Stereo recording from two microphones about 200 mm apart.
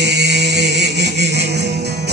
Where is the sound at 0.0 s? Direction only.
60° right (ahead or behind).